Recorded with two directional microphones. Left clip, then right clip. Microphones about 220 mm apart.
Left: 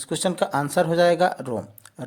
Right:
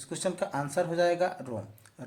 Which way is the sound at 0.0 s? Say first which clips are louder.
Left 8 dB; 40° left (ahead or behind).